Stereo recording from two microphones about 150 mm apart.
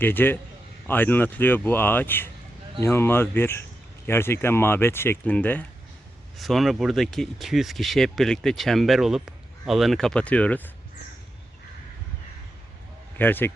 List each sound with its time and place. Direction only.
0.0 s speech: 15° left (ahead or behind)
6.3 s speech: centre (ahead or behind)
13.1 s speech: 15° left (ahead or behind)